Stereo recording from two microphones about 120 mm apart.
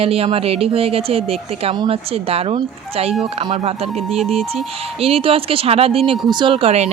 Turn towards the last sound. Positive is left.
turn(degrees=-60)  # may be behind; listen again after turning